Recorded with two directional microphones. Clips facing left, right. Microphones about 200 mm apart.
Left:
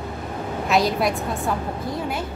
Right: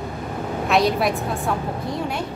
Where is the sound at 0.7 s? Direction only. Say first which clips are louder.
Right 1 dB; centre (ahead or behind).